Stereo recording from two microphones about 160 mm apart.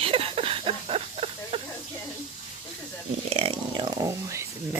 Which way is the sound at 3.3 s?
35° right (ahead or behind).